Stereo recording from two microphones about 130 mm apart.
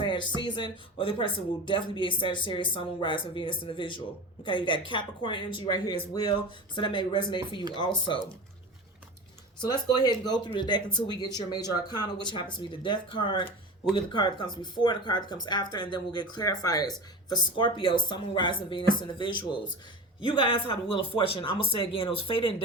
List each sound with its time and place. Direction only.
0.0 s speech: 35° left (ahead or behind)
9.6 s speech: 30° left (ahead or behind)